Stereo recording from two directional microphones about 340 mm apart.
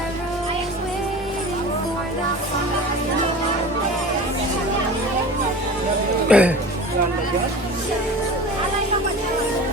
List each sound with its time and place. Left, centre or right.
6.2 s speech: centre